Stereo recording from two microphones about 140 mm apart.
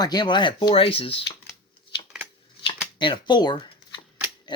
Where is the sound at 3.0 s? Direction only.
35° left (ahead or behind).